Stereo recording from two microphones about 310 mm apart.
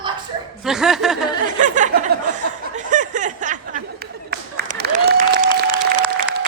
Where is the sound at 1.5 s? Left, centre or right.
Right.